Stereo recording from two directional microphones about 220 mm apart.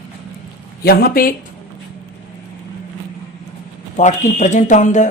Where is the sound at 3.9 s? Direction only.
35° left (ahead or behind).